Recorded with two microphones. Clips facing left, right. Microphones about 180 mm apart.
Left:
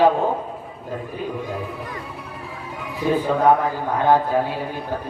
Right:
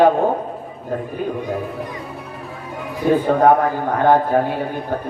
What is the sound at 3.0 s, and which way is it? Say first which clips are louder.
A man's voice: right 4 dB; 55° right (ahead or behind).